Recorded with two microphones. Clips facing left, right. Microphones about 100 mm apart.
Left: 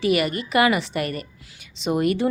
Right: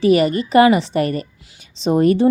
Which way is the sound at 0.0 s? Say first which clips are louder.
Right 7 dB; 35° right (ahead or behind).